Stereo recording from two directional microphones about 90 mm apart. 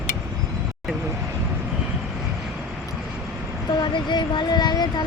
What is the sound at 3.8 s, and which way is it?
Speech, 55° left (ahead or behind).